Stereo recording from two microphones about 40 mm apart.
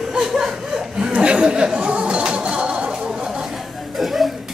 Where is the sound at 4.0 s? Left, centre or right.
Centre.